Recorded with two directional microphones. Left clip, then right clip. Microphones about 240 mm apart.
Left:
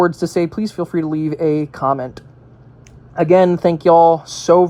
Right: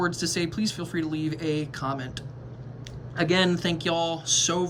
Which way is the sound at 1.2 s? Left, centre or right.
Centre.